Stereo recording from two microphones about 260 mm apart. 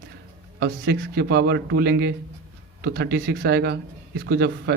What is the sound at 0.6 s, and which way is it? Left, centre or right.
A man's voice, right.